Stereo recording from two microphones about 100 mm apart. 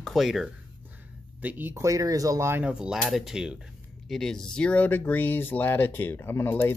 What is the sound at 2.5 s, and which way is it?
Speech, 20° right (ahead or behind).